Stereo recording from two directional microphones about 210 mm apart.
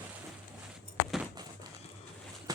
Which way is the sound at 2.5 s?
15° right (ahead or behind).